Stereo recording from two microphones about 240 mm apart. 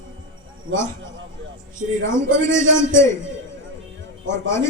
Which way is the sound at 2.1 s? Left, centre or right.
Centre.